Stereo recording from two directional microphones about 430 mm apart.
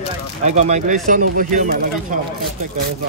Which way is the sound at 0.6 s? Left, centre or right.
Centre.